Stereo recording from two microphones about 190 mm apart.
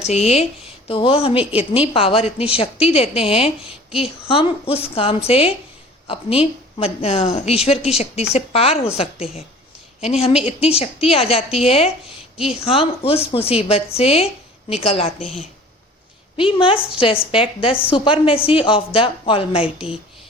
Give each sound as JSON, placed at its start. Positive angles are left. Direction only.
{"t": 0.0, "sound": "a woman's voice", "side_deg": 35}
{"t": 16.4, "sound": "a woman's voice", "side_deg": 25}